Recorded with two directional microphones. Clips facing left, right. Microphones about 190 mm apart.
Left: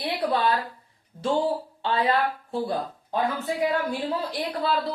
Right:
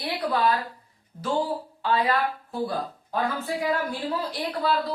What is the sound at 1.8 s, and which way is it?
Speech, 30° left (ahead or behind).